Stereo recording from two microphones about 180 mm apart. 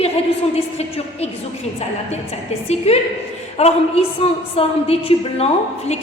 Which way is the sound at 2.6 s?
35° left (ahead or behind).